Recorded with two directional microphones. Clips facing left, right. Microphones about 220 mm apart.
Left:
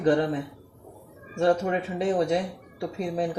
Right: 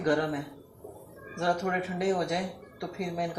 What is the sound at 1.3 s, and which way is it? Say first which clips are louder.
Speech: left 6 dB; 25° left (ahead or behind).